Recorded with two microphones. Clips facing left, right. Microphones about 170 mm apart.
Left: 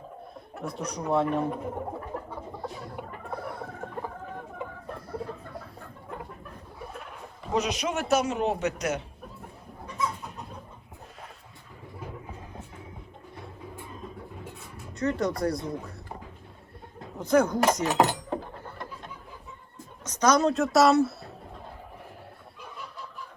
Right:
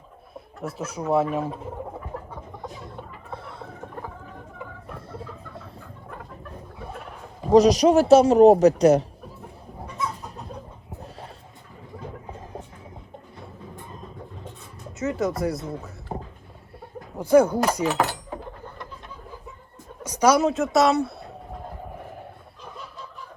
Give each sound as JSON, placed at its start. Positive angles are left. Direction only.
{"t": 0.6, "sound": "speech", "side_deg": -5}
{"t": 2.6, "sound": "chicken", "side_deg": -20}
{"t": 4.9, "sound": "chicken", "side_deg": -25}
{"t": 7.4, "sound": "a man's voice", "side_deg": -35}
{"t": 14.9, "sound": "speech", "side_deg": -5}
{"t": 16.1, "sound": "a sound", "side_deg": -50}
{"t": 17.2, "sound": "speech", "side_deg": -10}
{"t": 17.8, "sound": "a sound", "side_deg": 20}
{"t": 20.1, "sound": "a woman's voice", "side_deg": -10}